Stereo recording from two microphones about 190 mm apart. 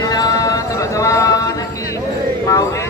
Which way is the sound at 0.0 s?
20° left (ahead or behind).